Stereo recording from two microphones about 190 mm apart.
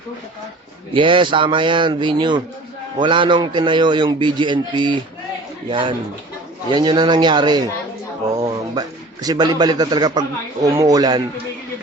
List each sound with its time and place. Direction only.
0.9 s a man's voice: 25° right (ahead or behind)